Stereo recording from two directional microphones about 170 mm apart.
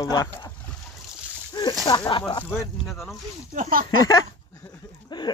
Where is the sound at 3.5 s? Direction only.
50° right (ahead or behind).